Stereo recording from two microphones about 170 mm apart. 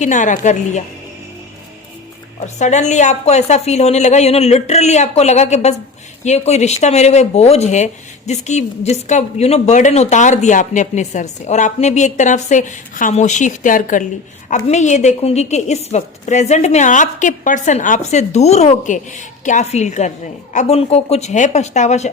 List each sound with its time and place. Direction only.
0.0 s a woman's voice: 45° left (ahead or behind)
2.6 s a woman's voice: 45° left (ahead or behind)